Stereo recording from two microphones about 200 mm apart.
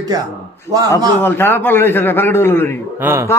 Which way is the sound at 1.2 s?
10° left (ahead or behind).